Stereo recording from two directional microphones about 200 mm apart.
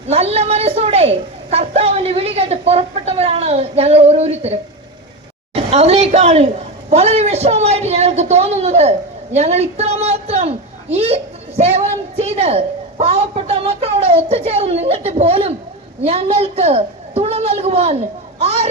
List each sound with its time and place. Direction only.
0.1 s a woman's voice: 30° right (ahead or behind)
5.5 s a woman's voice: 30° right (ahead or behind)